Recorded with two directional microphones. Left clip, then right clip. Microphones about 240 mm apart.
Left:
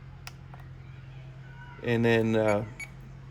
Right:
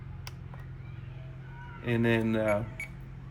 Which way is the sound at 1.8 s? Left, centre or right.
Left.